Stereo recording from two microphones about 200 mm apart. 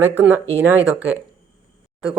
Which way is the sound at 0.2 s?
5° right (ahead or behind).